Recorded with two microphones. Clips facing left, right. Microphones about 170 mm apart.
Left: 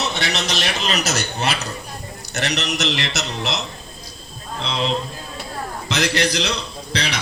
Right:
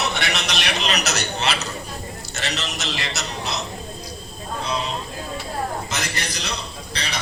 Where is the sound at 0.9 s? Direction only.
50° left (ahead or behind).